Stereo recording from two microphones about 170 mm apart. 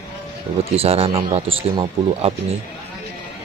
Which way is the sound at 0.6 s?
35° right (ahead or behind).